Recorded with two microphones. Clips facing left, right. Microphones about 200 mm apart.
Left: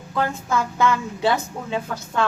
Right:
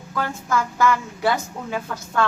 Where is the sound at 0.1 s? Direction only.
20° left (ahead or behind).